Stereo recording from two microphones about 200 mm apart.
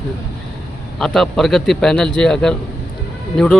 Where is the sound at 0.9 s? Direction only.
Centre (ahead or behind).